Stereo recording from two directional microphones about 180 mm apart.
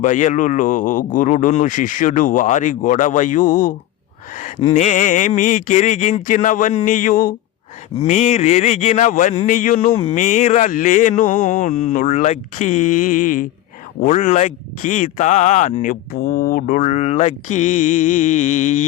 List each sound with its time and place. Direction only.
0.0 s a man's voice: 45° left (ahead or behind)